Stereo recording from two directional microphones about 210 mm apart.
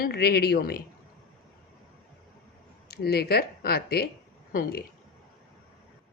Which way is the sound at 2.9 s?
50° left (ahead or behind).